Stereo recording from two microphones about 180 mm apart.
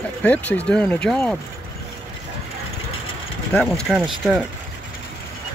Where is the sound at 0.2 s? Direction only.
10° left (ahead or behind).